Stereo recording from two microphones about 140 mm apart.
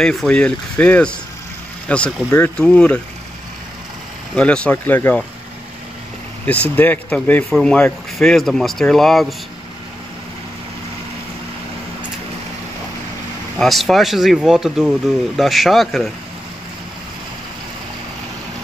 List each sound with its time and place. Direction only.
0.0 s speech: 5° left (ahead or behind)
4.4 s speech: 10° left (ahead or behind)
6.4 s speech: 10° left (ahead or behind)
13.6 s speech: centre (ahead or behind)